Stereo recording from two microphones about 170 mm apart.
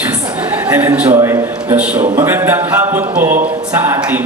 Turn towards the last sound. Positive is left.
turn(degrees=-10)  # may be behind; listen again after turning